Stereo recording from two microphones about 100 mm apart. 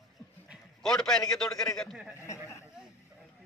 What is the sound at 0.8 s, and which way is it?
A man's voice, 5° left (ahead or behind).